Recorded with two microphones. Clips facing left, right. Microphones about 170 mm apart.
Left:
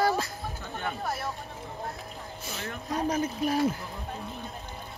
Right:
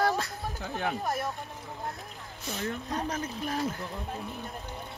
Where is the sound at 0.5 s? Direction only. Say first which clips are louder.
Right 3 dB; 40° right (ahead or behind).